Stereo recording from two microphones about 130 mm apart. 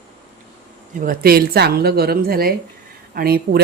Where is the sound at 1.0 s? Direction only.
90° right.